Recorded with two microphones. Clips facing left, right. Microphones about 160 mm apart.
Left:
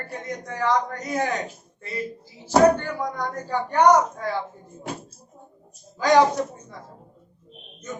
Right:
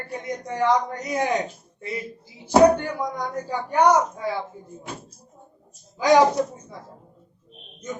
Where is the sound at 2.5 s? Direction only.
15° right (ahead or behind).